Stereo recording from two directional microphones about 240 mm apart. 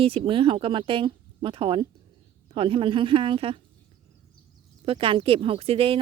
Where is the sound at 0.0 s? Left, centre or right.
Right.